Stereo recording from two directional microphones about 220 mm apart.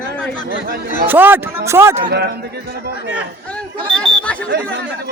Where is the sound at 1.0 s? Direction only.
10° right (ahead or behind).